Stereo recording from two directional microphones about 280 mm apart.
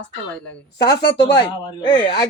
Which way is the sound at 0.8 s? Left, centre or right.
Left.